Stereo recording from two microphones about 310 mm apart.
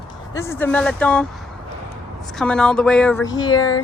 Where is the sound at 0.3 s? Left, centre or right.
Centre.